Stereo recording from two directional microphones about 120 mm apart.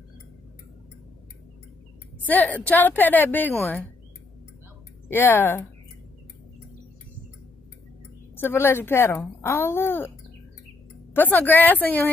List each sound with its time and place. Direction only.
2.2 s a woman's voice: 15° left (ahead or behind)
5.1 s a woman's voice: 15° left (ahead or behind)
8.4 s speech: 20° left (ahead or behind)
11.1 s a woman's voice: 15° left (ahead or behind)